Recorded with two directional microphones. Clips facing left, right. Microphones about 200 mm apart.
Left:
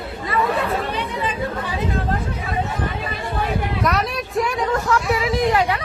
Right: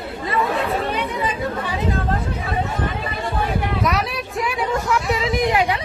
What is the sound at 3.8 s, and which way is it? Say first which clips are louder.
Speech: left 1 dB; centre (ahead or behind).